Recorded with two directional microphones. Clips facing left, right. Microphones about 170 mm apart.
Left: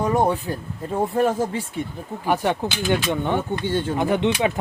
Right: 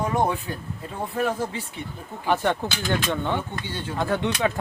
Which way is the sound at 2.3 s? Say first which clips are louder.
Left 1 dB; 10° left (ahead or behind).